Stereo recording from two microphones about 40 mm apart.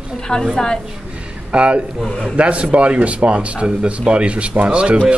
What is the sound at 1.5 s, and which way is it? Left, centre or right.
A man's voice, right.